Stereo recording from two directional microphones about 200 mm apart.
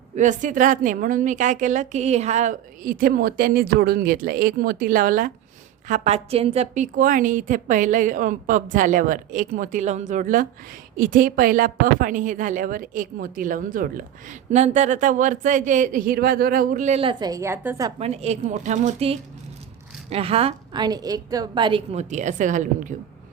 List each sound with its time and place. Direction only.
0.2 s a woman's voice: 40° right (ahead or behind)
5.9 s a woman's voice: 35° right (ahead or behind); by 17.9 s 15° right (ahead or behind)
18.0 s a woman's voice: 30° right (ahead or behind)